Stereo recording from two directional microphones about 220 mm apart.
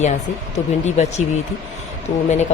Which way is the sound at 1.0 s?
30° left (ahead or behind).